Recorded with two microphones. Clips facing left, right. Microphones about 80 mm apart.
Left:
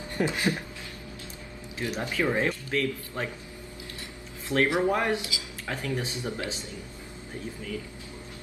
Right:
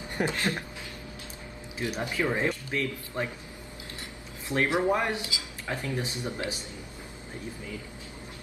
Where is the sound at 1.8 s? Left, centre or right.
Centre.